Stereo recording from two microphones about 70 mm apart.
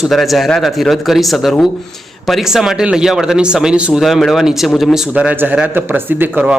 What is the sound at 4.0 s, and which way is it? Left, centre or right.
Speech, centre.